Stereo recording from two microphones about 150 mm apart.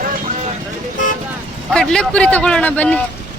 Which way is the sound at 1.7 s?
5° left (ahead or behind).